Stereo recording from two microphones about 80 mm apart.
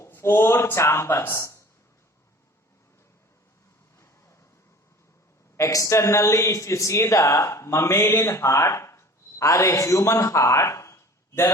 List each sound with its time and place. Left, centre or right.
0.1 s speech: left
3.9 s vehicle: left
5.5 s speech: left